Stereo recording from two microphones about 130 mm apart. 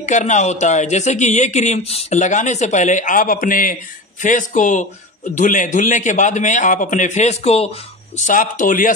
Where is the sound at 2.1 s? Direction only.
70° left (ahead or behind); by 3.7 s 90° left.